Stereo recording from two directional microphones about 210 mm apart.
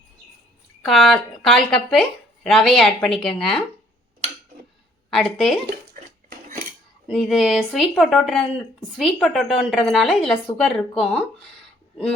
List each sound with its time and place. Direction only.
0.9 s speech: centre (ahead or behind)
5.1 s speech: centre (ahead or behind)
7.1 s speech: centre (ahead or behind)